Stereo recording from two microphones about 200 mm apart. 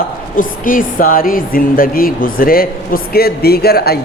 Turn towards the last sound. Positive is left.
turn(degrees=50)  # may be behind; listen again after turning